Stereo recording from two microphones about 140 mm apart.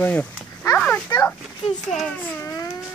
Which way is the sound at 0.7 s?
10° left (ahead or behind).